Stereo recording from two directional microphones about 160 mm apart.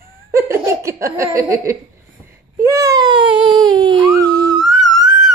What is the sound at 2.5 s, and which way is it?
Baby cry, 20° right (ahead or behind).